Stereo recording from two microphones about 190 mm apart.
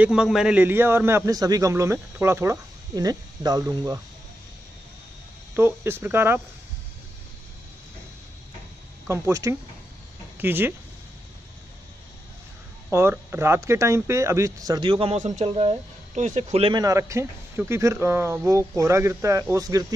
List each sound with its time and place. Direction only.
0.0 s a man's voice: 5° right (ahead or behind)
5.6 s a man's voice: 10° right (ahead or behind)
9.1 s a man's voice: 15° right (ahead or behind)
12.9 s speech: 15° right (ahead or behind); by 16.8 s 30° right (ahead or behind)
16.8 s a man's voice: 15° right (ahead or behind)